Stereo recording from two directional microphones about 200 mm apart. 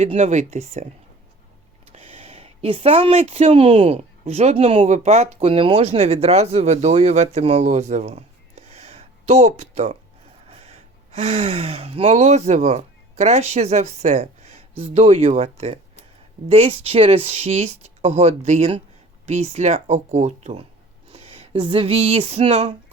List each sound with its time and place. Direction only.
0.0 s speech: 35° right (ahead or behind)
1.9 s speech: 30° right (ahead or behind)
21.1 s a sound: 30° right (ahead or behind)